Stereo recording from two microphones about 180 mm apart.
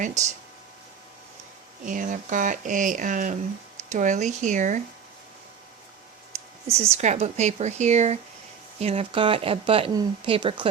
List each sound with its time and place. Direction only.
0.0 s speech: 40° right (ahead or behind)
1.8 s speech: 45° right (ahead or behind)
6.7 s speech: 35° right (ahead or behind)